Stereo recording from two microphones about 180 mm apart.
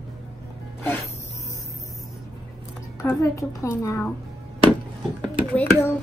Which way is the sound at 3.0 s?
15° left (ahead or behind).